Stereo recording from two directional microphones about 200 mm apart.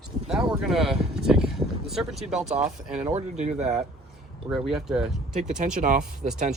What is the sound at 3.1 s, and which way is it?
Speech, 35° right (ahead or behind).